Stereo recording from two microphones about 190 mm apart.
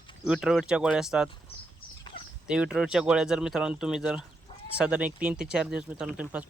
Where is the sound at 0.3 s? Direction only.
Centre (ahead or behind).